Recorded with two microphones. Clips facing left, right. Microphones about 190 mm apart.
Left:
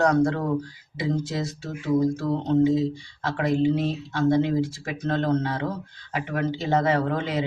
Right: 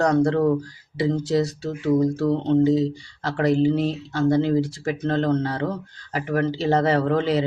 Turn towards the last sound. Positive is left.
turn(degrees=-35)  # may be behind; listen again after turning